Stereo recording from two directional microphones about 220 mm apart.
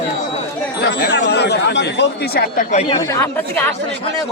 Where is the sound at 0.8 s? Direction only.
50° left (ahead or behind).